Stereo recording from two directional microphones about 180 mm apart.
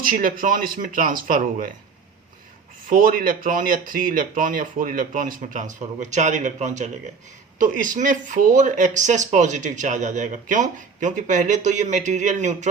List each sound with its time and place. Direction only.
0.0 s speech: 50° right (ahead or behind)
2.9 s speech: 50° right (ahead or behind)